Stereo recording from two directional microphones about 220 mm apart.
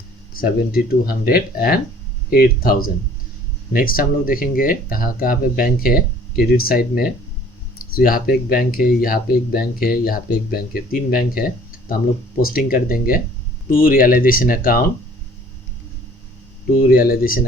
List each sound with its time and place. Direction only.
0.3 s speech: 40° left (ahead or behind)
16.8 s speech: 40° left (ahead or behind)